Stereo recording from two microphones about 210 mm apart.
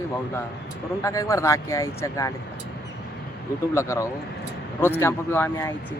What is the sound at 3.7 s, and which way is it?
Speech, 15° left (ahead or behind).